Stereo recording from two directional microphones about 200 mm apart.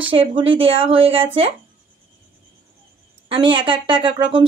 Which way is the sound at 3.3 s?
25° right (ahead or behind).